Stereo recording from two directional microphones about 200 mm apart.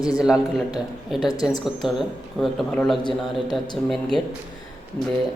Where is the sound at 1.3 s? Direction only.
20° left (ahead or behind).